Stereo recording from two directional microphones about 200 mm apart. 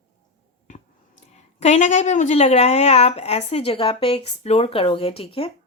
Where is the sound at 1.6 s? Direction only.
35° left (ahead or behind).